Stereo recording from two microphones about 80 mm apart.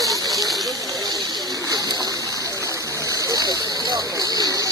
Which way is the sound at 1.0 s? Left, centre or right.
Right.